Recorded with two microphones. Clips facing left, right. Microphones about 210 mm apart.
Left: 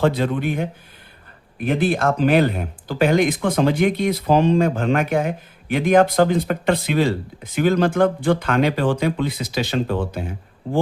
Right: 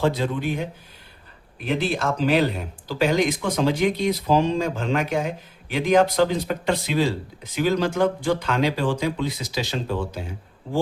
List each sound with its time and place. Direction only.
0.0 s speech: 60° left (ahead or behind)